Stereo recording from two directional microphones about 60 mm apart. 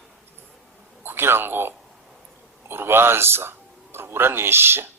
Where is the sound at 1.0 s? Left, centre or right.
Right.